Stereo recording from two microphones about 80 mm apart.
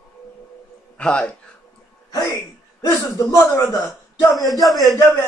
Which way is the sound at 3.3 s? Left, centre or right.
Left.